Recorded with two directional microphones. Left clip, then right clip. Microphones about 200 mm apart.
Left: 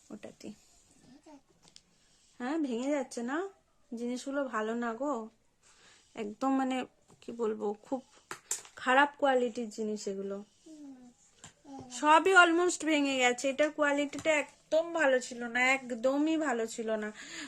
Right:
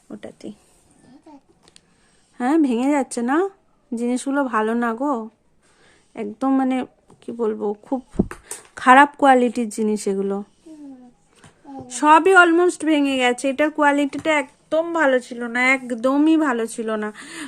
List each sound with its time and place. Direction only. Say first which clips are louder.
2.4 s speech: right 15 dB; 35° right (ahead or behind)
6.1 s speech: right 10 dB; 10° right (ahead or behind)
8.7 s speech: right 14 dB; 30° right (ahead or behind)
12.0 s speech: right 10 dB; 15° right (ahead or behind)